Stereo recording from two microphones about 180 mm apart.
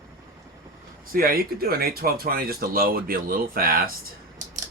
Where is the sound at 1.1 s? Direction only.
55° right (ahead or behind).